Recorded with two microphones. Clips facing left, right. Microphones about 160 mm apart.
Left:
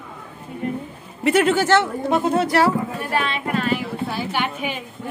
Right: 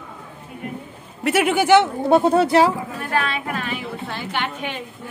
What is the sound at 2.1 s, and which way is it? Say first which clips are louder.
Speech: right 5 dB; 35° right (ahead or behind).